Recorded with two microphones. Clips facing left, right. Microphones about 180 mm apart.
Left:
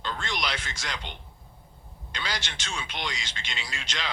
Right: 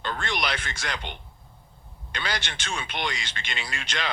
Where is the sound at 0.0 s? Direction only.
60° right (ahead or behind).